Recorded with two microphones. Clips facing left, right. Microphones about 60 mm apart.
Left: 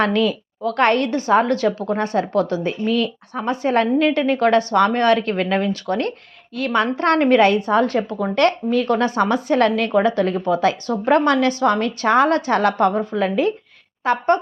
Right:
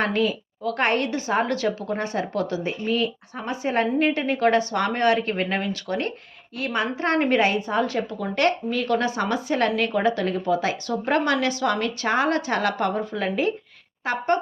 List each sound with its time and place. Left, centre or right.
0.0 s a woman's voice: left
2.8 s a woman's voice: left